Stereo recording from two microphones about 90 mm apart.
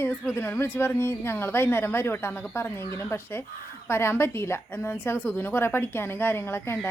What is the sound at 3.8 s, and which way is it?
A woman's voice, 25° left (ahead or behind).